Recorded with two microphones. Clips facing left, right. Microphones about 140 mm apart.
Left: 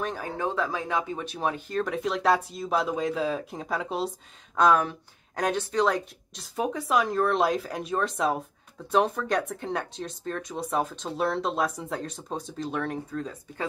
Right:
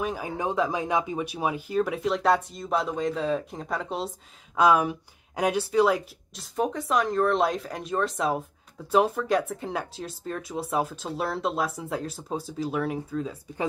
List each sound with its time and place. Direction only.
0.0 s speech: 10° right (ahead or behind)
4.6 s speech: 10° right (ahead or behind)